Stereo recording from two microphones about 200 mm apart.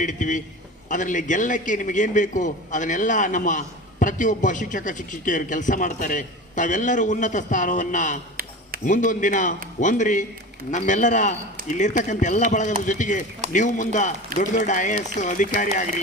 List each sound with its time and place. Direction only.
0.0 s a man's voice: 40° left (ahead or behind)